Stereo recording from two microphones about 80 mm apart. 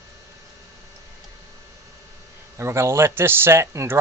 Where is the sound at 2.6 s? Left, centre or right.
Right.